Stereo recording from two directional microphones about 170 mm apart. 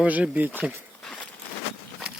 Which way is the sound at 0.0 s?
10° right (ahead or behind).